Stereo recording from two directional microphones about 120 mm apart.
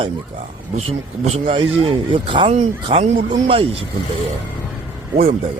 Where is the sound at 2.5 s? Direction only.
65° right (ahead or behind).